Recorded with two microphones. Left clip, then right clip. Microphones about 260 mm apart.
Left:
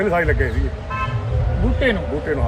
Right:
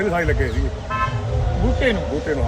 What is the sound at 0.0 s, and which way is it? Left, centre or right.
Speech, centre.